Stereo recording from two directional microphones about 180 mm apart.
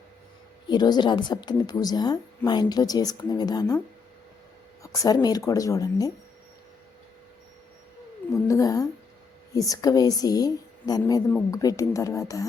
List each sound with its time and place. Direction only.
0.7 s a woman's voice: 25° left (ahead or behind)
4.8 s a woman's voice: 20° left (ahead or behind)
8.4 s a woman's voice: 20° left (ahead or behind)